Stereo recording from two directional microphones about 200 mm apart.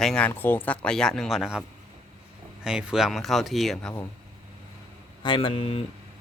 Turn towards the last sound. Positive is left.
turn(degrees=30)  # may be behind; listen again after turning